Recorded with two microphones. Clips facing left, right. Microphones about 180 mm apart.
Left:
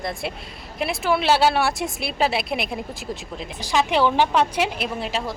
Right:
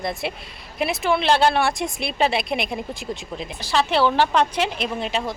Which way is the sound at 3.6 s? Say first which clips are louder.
Even; 15° left (ahead or behind).